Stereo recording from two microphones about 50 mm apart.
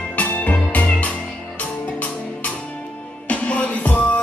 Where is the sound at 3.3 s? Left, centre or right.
Left.